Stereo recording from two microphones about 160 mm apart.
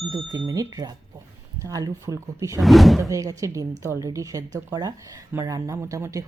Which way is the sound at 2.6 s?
Centre (ahead or behind).